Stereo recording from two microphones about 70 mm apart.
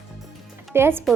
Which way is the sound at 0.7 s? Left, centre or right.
Right.